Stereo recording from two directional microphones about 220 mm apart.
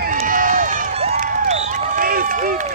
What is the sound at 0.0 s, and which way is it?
Crowd, 35° right (ahead or behind).